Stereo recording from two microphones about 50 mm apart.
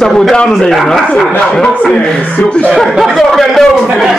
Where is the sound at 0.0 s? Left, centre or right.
Centre.